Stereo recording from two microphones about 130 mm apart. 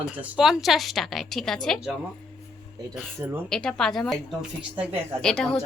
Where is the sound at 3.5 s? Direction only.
5° left (ahead or behind).